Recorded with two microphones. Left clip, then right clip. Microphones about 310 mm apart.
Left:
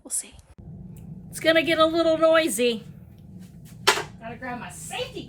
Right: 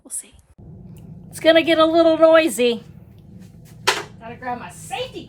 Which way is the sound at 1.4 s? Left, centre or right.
Centre.